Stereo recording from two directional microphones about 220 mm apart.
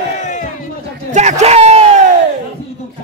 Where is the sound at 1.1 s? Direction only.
30° right (ahead or behind).